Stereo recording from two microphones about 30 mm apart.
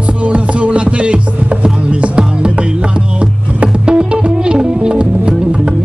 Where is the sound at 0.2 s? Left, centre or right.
Right.